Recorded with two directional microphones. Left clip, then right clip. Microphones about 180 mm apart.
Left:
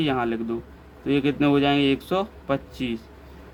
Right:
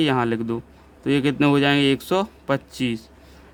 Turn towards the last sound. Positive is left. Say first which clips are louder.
# right 3 dB
turn(degrees=-65)  # may be behind; listen again after turning